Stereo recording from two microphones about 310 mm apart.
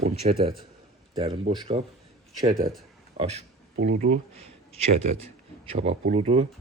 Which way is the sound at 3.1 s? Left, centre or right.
Right.